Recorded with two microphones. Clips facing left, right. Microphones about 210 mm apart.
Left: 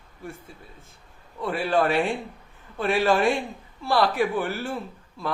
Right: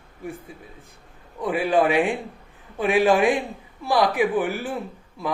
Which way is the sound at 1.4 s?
15° right (ahead or behind).